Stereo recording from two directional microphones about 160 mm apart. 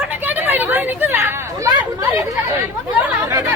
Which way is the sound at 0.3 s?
10° right (ahead or behind).